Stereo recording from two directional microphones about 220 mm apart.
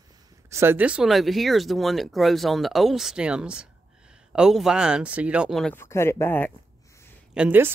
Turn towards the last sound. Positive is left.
turn(degrees=-5)  # may be behind; listen again after turning